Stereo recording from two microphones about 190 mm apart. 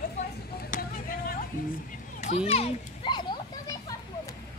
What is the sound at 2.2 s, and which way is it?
Children playing, 35° left (ahead or behind).